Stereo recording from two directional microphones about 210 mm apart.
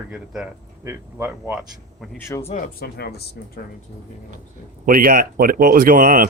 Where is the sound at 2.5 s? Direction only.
40° left (ahead or behind).